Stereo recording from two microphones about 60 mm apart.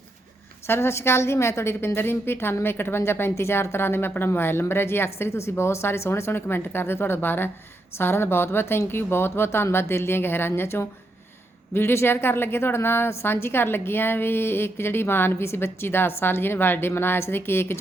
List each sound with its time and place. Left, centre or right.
0.7 s a woman's voice: left